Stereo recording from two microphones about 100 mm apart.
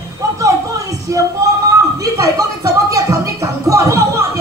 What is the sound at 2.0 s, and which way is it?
Music, 35° right (ahead or behind).